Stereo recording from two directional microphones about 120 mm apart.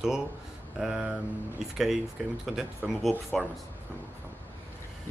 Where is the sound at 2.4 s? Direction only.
5° right (ahead or behind).